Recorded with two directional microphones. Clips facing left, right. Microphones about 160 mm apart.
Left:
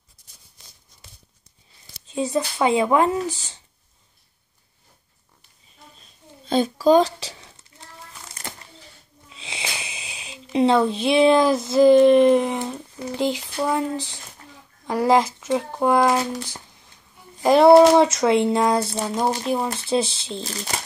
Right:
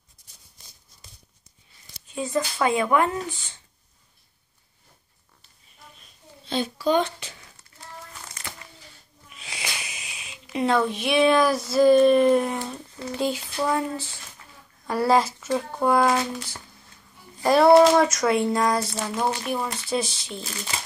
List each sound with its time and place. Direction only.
2.0 s speech: 20° left (ahead or behind)
6.5 s speech: 40° left (ahead or behind)
8.4 s a sound: 40° left (ahead or behind)
9.3 s speech: 25° left (ahead or behind)